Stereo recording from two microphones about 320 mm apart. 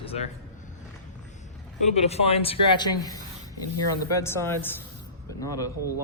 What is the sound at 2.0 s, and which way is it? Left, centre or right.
Speech, centre.